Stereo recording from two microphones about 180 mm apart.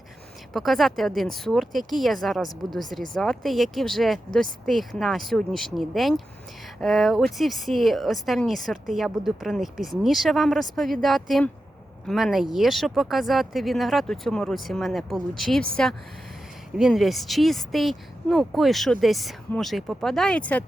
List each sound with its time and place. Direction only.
0.5 s speech: centre (ahead or behind)